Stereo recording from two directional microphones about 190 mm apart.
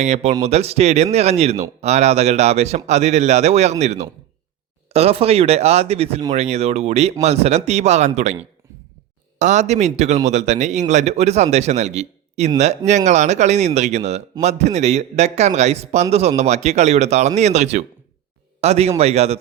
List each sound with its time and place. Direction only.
0.0 s a man's voice: 35° right (ahead or behind)
9.4 s a man's voice: 35° right (ahead or behind)